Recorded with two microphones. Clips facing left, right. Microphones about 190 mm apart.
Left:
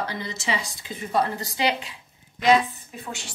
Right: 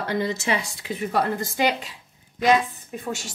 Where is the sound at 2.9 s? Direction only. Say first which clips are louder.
Right 7 dB; 45° right (ahead or behind).